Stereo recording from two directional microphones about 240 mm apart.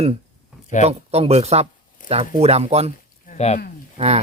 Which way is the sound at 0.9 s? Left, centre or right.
Right.